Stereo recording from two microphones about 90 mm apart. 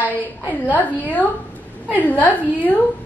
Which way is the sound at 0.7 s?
20° left (ahead or behind).